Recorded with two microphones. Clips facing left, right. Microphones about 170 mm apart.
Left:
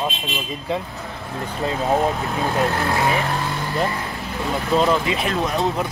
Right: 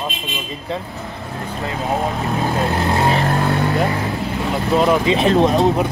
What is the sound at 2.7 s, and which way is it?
Speech, 20° right (ahead or behind).